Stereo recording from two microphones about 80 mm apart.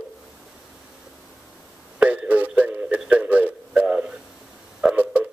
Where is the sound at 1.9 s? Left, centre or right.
Centre.